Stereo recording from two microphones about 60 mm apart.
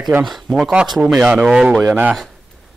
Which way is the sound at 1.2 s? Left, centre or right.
Right.